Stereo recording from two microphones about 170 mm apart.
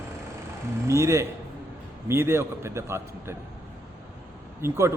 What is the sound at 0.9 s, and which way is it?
A man's voice, 15° right (ahead or behind).